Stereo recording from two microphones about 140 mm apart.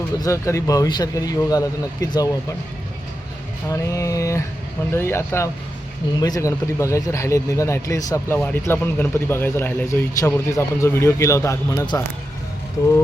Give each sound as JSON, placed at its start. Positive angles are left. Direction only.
{"t": 0.2, "sound": "speech", "side_deg": 20}
{"t": 3.7, "sound": "speech", "side_deg": 20}